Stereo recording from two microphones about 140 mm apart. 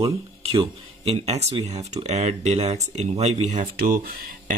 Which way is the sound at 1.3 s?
50° right (ahead or behind).